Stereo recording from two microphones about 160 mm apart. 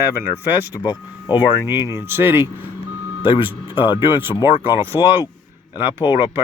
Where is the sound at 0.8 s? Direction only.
30° left (ahead or behind).